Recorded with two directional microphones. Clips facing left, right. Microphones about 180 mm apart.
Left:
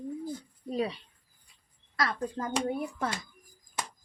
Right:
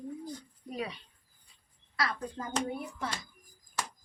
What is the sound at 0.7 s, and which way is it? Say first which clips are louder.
Speech: left 7 dB; 30° left (ahead or behind).